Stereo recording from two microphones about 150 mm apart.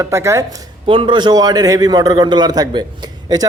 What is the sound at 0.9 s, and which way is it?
A man's voice, 35° right (ahead or behind).